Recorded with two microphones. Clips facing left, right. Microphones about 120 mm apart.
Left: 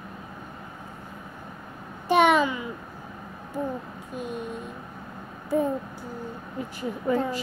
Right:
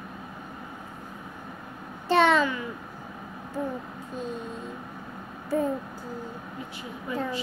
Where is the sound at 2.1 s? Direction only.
15° left (ahead or behind).